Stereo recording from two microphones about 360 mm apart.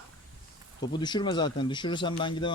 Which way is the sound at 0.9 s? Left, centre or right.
Centre.